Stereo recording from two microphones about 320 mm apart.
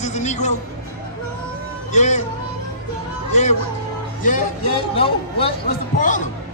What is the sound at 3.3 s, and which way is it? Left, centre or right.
Speech, left.